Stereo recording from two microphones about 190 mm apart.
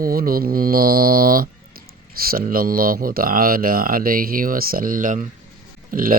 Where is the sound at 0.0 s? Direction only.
50° right (ahead or behind).